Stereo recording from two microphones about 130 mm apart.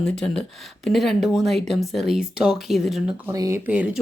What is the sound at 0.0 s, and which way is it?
Speech, 5° left (ahead or behind).